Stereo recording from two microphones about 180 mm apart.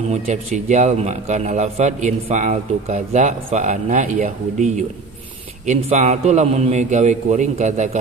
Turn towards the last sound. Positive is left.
turn(degrees=-40)  # may be behind; listen again after turning